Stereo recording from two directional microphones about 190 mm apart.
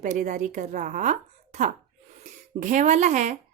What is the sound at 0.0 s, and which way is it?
A woman's voice, 40° right (ahead or behind).